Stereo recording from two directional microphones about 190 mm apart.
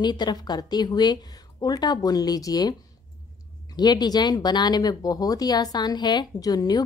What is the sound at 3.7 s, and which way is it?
A woman's voice, 20° left (ahead or behind).